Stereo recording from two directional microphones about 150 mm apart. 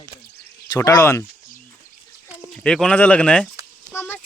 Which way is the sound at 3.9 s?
15° left (ahead or behind).